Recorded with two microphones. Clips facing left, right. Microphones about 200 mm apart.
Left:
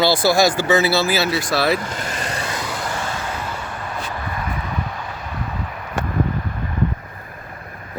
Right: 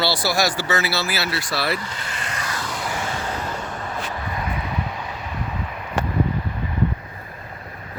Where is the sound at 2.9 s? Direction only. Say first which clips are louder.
Even; 25° right (ahead or behind).